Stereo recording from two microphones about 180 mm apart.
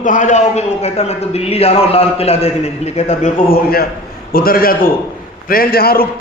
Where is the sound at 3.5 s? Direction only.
55° left (ahead or behind).